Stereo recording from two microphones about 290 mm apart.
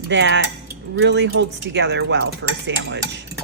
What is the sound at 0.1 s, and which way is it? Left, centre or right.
Speech, right.